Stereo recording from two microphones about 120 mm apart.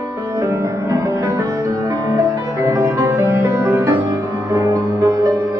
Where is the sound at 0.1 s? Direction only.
30° right (ahead or behind).